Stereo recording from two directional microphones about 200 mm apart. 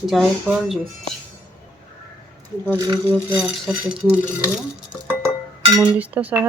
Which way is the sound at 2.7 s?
15° right (ahead or behind).